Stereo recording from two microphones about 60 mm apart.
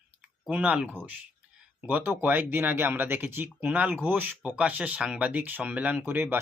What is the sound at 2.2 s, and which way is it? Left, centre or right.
Speech, right.